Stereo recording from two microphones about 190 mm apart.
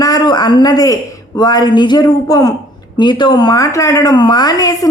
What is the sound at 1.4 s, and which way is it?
A woman's voice, 20° left (ahead or behind).